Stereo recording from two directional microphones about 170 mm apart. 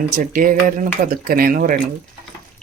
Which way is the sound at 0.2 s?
55° right (ahead or behind).